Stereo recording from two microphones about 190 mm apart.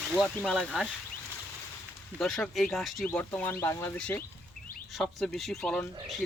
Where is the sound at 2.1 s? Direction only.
5° left (ahead or behind).